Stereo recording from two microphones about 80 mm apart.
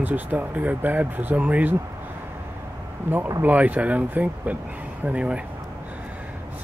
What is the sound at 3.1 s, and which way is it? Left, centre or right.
Speech, right.